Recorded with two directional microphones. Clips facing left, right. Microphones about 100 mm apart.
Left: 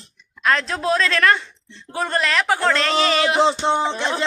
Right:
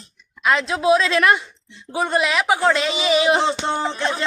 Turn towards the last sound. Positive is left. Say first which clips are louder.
# left 2 dB
turn(degrees=20)  # may be behind; listen again after turning